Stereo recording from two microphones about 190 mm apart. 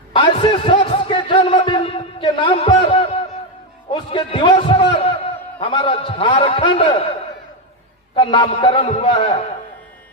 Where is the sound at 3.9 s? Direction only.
25° left (ahead or behind).